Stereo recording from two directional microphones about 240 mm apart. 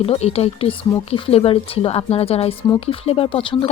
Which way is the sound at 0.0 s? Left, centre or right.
Left.